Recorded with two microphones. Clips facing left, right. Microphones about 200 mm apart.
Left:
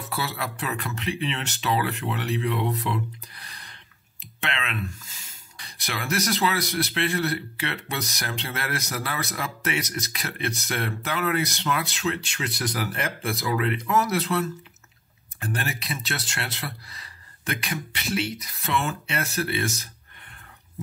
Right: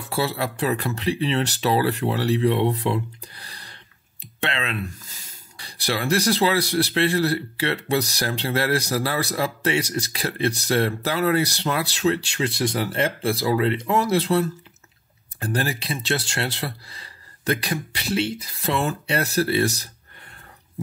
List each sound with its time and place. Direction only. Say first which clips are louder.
0.0 s speech: right 6 dB; 30° right (ahead or behind)